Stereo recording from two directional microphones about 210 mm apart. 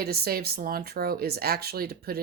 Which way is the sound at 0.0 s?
50° right (ahead or behind).